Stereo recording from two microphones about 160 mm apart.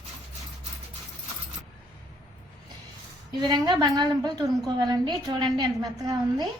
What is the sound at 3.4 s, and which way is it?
A woman's voice, 25° right (ahead or behind).